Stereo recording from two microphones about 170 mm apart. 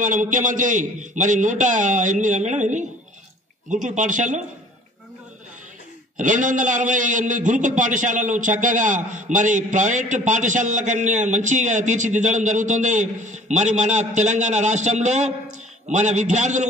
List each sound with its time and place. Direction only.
0.0 s a man's voice: 50° right (ahead or behind)
6.1 s a man's voice: 50° right (ahead or behind)